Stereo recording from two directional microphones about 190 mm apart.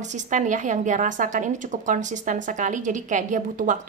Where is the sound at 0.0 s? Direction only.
40° right (ahead or behind).